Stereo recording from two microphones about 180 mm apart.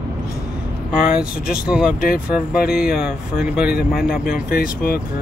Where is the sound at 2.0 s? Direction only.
55° left (ahead or behind).